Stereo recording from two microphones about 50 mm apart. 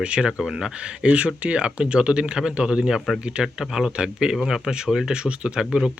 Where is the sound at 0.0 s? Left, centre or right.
Right.